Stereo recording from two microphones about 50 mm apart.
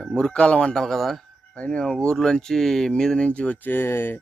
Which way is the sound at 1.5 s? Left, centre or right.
Left.